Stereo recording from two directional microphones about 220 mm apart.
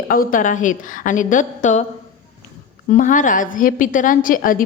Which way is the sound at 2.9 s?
35° left (ahead or behind).